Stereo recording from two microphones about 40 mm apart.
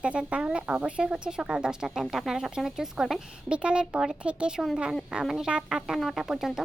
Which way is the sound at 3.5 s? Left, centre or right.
Right.